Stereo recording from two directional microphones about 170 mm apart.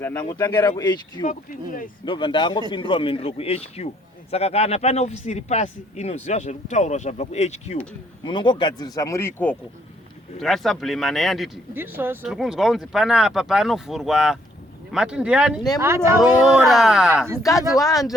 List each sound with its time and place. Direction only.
0.0 s speech: 10° left (ahead or behind)
1.2 s speech: 50° left (ahead or behind)
2.0 s speech: 30° left (ahead or behind)
8.2 s speech: 25° left (ahead or behind); by 9.6 s 10° left (ahead or behind)
10.4 s speech: centre (ahead or behind)
11.7 s speech: 10° right (ahead or behind)
17.4 s speech: 20° left (ahead or behind)